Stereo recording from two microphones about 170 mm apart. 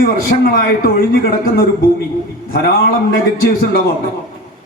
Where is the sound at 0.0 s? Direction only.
55° left (ahead or behind).